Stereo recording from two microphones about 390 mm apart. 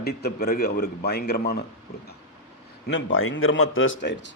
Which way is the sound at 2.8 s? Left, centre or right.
Left.